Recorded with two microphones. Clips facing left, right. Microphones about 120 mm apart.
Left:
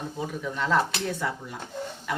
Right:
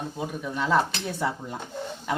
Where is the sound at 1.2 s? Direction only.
20° right (ahead or behind).